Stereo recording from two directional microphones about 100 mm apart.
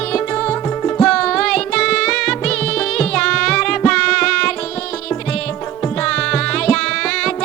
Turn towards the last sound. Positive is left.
turn(degrees=10)  # may be behind; listen again after turning